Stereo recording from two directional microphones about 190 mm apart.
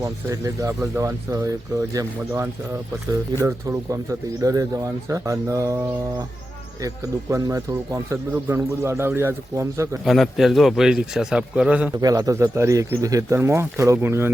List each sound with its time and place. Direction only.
0.0 s speech: 15° right (ahead or behind)
6.8 s speech: 15° right (ahead or behind)
10.1 s a man's voice: centre (ahead or behind)
11.9 s speech: 20° right (ahead or behind)